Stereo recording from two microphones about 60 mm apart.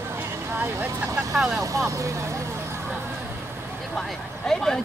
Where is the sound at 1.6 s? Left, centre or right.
Right.